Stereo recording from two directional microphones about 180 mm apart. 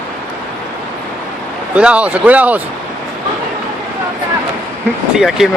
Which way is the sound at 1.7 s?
5° right (ahead or behind).